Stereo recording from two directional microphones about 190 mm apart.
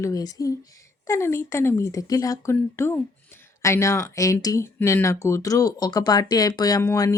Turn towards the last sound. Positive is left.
turn(degrees=15)  # may be behind; listen again after turning